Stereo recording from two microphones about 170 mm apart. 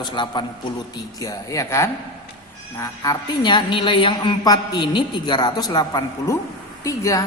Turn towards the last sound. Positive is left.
turn(degrees=20)  # may be behind; listen again after turning